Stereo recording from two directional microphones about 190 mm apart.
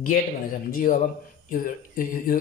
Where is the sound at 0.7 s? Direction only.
45° left (ahead or behind).